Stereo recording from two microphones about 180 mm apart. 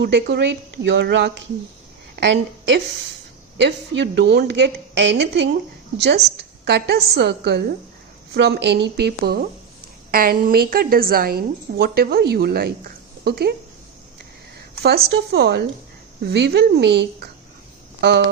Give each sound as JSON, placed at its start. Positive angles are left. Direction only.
{"t": 0.0, "sound": "a woman's voice", "side_deg": -70}
{"t": 2.1, "sound": "a woman's voice", "side_deg": -85}
{"t": 14.8, "sound": "a woman's voice", "side_deg": -65}